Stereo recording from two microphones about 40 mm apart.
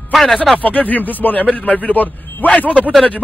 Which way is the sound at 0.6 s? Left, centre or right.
Left.